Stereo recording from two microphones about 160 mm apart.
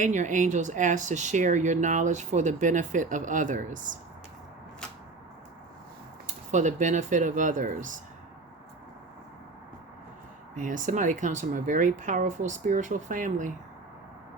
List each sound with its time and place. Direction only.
0.0 s speech: 50° right (ahead or behind)
6.2 s speech: 50° right (ahead or behind)
10.5 s speech: 55° right (ahead or behind)